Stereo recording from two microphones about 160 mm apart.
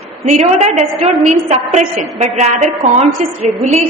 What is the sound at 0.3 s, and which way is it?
A woman's voice, 45° right (ahead or behind).